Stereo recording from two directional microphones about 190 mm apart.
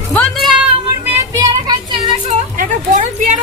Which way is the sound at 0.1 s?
5° left (ahead or behind).